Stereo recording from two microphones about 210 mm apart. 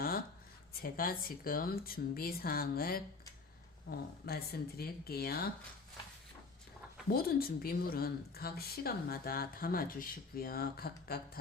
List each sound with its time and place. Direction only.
0.8 s speech: 45° left (ahead or behind)
7.1 s speech: 45° left (ahead or behind)